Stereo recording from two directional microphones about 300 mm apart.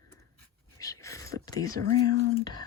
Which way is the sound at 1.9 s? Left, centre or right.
Centre.